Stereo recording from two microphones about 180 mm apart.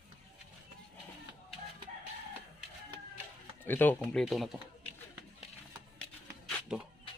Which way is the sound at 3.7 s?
10° left (ahead or behind).